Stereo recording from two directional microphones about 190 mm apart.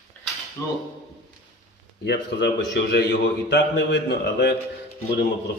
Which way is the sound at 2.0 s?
65° left (ahead or behind).